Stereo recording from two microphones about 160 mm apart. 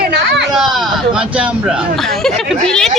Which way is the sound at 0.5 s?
Centre (ahead or behind).